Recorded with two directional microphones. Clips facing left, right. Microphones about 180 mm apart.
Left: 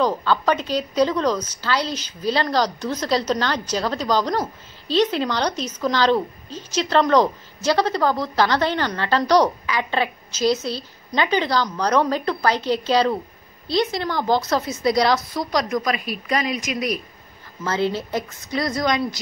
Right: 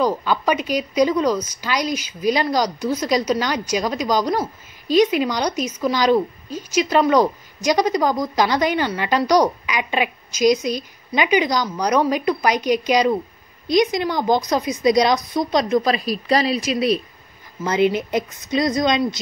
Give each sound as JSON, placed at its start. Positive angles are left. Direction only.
{"t": 0.0, "sound": "a woman's voice", "side_deg": -10}
{"t": 17.6, "sound": "a woman's voice", "side_deg": -15}